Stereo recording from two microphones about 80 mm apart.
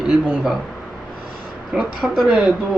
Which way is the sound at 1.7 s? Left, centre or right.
Centre.